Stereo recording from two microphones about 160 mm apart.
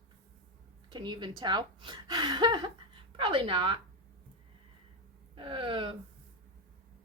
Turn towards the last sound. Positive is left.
turn(degrees=-35)  # may be behind; listen again after turning